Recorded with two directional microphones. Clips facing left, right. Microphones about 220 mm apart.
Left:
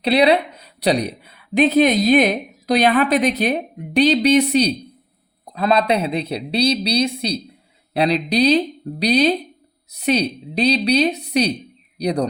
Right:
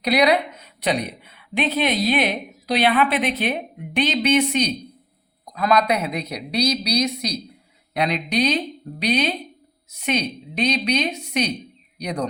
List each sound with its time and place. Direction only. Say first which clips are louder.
0.0 s a woman's voice: left 3 dB; 30° left (ahead or behind)